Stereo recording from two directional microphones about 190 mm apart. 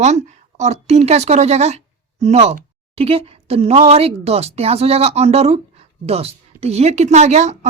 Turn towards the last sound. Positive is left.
turn(degrees=-35)  # may be behind; listen again after turning